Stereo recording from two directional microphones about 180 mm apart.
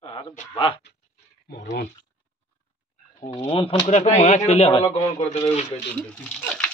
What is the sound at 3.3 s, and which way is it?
Speech, 30° left (ahead or behind).